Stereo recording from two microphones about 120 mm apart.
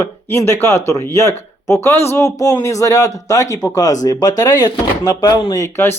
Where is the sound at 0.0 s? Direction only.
20° left (ahead or behind).